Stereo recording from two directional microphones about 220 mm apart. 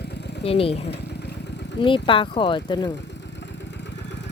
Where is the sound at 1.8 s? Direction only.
25° left (ahead or behind).